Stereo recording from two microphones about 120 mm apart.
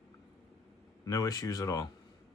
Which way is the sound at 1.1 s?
30° left (ahead or behind).